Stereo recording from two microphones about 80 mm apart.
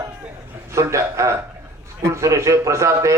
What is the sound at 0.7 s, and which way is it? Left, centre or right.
A man's voice, right.